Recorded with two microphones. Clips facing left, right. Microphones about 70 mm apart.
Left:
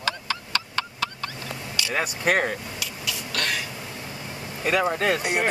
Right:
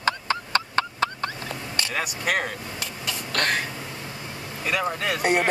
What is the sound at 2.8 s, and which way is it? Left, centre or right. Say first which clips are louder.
Cough: right 1 dB; right.